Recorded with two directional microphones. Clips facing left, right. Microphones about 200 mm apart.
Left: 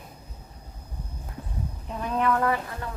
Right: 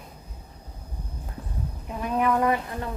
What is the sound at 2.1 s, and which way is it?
Speech, 15° right (ahead or behind).